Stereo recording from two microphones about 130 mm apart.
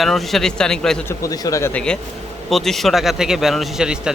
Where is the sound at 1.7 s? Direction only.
5° left (ahead or behind).